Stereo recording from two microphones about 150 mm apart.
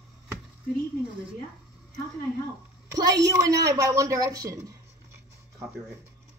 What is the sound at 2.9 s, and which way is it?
A woman's voice, 25° right (ahead or behind).